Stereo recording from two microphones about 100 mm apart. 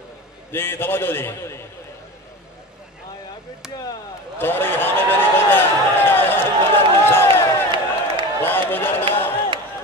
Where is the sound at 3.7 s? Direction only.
40° left (ahead or behind).